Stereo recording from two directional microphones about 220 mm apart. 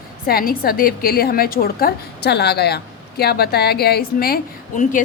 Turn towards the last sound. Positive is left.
turn(degrees=40)  # may be behind; listen again after turning